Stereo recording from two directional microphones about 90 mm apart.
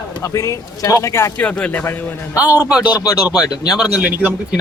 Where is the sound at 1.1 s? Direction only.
30° left (ahead or behind).